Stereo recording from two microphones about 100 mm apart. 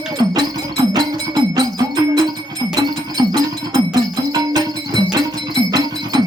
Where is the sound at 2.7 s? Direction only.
45° right (ahead or behind).